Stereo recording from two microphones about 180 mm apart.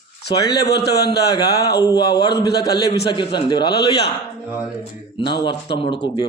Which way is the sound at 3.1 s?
25° left (ahead or behind).